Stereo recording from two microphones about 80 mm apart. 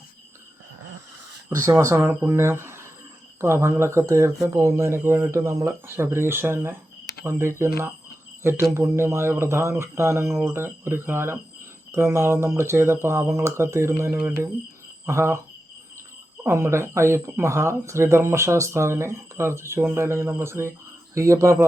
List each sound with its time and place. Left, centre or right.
1.5 s speech: right
8.7 s speech: right
16.4 s speech: right